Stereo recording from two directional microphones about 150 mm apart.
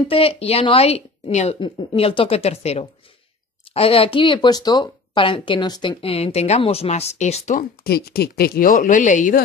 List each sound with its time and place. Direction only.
0.1 s a woman's voice: 40° left (ahead or behind)
7.8 s speech: 90° left; by 9.4 s 55° left (ahead or behind)